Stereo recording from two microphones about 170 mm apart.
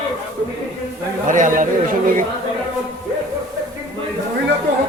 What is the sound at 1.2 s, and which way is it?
Chatter, 50° right (ahead or behind).